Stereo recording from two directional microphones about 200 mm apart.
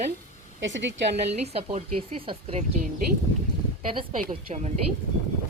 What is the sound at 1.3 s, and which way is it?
Speech, 30° right (ahead or behind).